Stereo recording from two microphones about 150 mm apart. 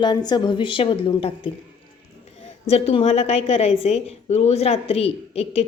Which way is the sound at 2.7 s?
45° left (ahead or behind).